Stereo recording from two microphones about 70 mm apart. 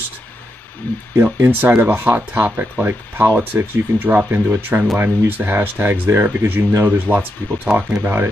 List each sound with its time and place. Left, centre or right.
0.8 s speech: left
1.2 s speech: right